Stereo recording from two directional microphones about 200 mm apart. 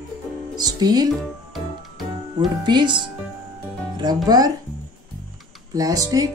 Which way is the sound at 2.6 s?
25° right (ahead or behind).